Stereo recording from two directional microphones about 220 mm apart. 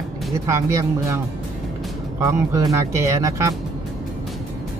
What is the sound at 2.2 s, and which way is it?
Speech, 15° right (ahead or behind).